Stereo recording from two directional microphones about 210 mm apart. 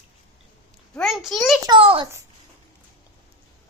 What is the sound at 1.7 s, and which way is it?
Speech, 25° right (ahead or behind).